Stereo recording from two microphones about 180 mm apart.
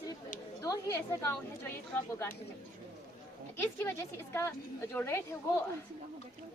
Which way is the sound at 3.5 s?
10° left (ahead or behind).